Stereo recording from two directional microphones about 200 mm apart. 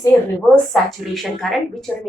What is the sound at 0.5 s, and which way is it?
A woman's voice, centre (ahead or behind).